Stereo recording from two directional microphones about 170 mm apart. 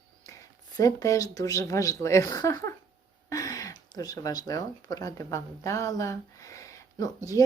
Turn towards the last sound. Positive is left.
turn(degrees=20)  # may be behind; listen again after turning